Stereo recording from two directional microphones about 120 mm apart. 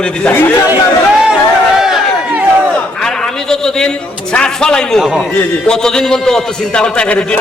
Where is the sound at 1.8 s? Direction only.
5° right (ahead or behind).